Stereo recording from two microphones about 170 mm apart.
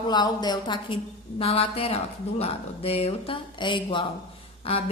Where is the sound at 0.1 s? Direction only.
25° left (ahead or behind).